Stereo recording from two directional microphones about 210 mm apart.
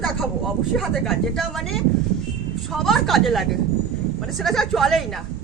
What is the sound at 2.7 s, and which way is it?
A woman's voice, centre (ahead or behind).